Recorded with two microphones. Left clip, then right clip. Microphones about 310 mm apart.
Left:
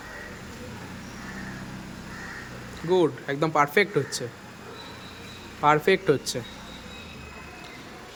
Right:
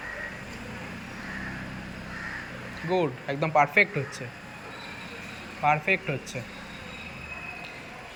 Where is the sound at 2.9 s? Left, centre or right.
Centre.